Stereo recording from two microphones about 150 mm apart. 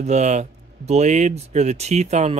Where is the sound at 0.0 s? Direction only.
50° right (ahead or behind).